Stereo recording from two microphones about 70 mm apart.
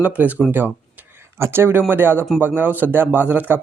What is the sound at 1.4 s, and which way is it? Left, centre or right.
Speech, right.